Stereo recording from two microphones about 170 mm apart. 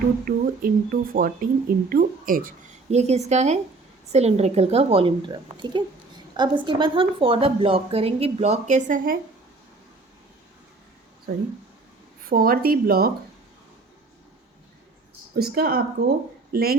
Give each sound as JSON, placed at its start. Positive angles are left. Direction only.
{"t": 0.3, "sound": "a woman's voice", "side_deg": -55}
{"t": 2.9, "sound": "a woman's voice", "side_deg": -40}
{"t": 12.3, "sound": "a woman's voice", "side_deg": -60}
{"t": 15.4, "sound": "a woman's voice", "side_deg": -65}